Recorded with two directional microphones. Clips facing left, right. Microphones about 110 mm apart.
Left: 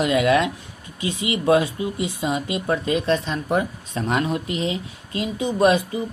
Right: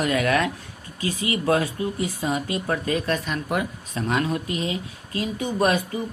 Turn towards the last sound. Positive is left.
turn(degrees=20)  # may be behind; listen again after turning